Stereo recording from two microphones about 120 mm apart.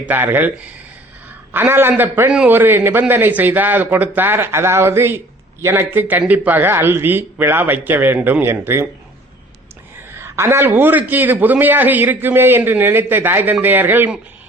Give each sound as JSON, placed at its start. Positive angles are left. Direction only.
{"t": 0.1, "sound": "a man's voice", "side_deg": -15}
{"t": 10.2, "sound": "a man's voice", "side_deg": -20}